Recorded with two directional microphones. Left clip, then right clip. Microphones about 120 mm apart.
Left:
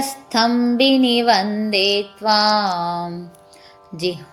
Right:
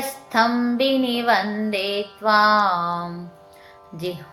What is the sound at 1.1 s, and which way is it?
Music, 70° left (ahead or behind).